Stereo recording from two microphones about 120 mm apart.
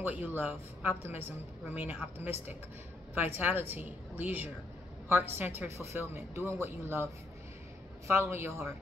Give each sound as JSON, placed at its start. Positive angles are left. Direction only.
{"t": 0.0, "sound": "a woman's voice", "side_deg": -10}
{"t": 8.1, "sound": "a woman's voice", "side_deg": -20}